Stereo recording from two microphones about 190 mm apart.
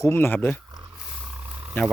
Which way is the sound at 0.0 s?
15° left (ahead or behind).